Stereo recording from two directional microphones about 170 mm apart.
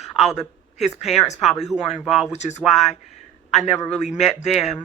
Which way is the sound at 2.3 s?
40° left (ahead or behind).